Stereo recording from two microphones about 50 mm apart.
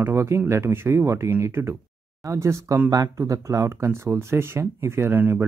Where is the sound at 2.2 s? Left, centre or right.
Right.